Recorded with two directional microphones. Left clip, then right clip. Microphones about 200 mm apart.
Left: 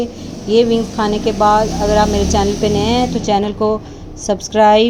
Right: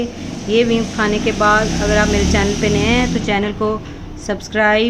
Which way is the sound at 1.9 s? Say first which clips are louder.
Left 1 dB; 15° left (ahead or behind).